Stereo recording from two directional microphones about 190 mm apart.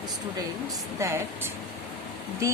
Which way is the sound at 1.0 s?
15° right (ahead or behind).